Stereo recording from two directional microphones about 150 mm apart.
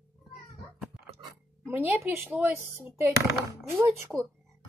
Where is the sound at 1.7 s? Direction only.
10° right (ahead or behind).